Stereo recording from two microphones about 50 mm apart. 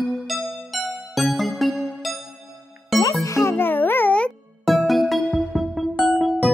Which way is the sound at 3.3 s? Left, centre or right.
Left.